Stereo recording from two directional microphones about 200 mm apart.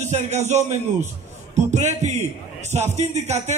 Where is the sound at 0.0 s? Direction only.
35° right (ahead or behind).